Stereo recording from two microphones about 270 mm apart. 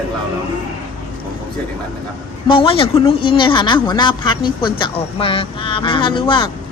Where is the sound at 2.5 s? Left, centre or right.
Centre.